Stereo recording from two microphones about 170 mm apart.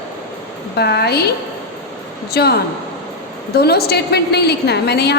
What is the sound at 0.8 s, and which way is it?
Speech, 70° left (ahead or behind).